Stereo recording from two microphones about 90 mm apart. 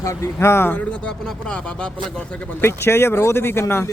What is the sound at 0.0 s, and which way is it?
Speech, 30° left (ahead or behind).